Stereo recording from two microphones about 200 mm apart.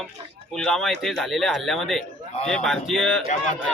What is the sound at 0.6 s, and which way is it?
A man's voice, centre (ahead or behind).